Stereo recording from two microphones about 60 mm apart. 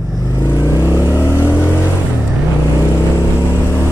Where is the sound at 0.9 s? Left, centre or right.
Left.